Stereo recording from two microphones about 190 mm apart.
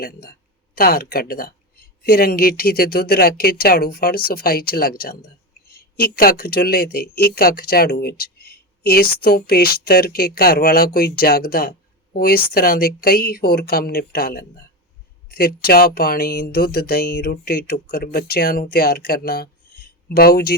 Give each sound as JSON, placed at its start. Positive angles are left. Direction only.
{"t": 0.0, "sound": "speech", "side_deg": 50}